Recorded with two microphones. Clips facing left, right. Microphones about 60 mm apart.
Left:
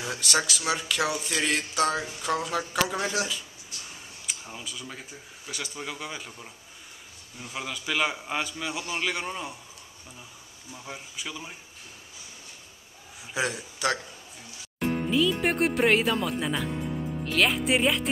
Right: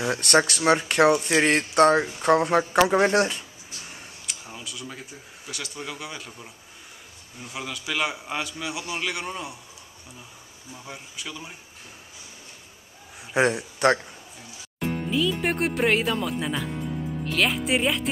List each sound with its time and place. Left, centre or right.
0.1 s speech: right
4.3 s tick-tock: centre
5.5 s a man's voice: centre
10.7 s a man's voice: centre
13.3 s a man's voice: right
15.0 s a man's voice: centre